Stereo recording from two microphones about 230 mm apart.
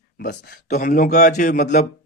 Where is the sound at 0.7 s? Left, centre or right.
Left.